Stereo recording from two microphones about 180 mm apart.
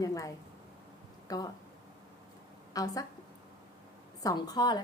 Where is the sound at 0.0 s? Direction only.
20° left (ahead or behind).